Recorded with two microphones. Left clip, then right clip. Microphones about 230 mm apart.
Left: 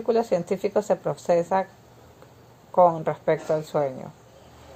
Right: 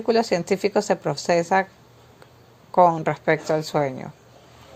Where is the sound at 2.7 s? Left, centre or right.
Right.